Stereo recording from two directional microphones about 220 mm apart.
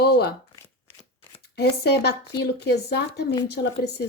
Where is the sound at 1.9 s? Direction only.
45° left (ahead or behind).